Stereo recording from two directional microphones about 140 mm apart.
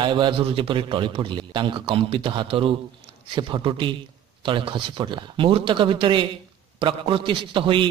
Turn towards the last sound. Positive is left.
turn(degrees=-35)  # may be behind; listen again after turning